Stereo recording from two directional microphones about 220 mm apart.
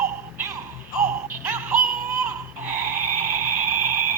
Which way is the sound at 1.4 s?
10° right (ahead or behind).